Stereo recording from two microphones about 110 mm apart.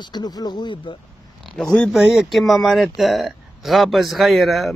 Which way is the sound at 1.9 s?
5° right (ahead or behind).